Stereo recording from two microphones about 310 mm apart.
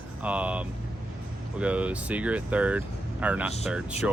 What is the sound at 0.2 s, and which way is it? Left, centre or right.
Speech, centre.